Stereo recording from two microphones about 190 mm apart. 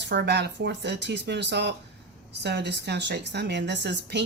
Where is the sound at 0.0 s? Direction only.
65° right (ahead or behind).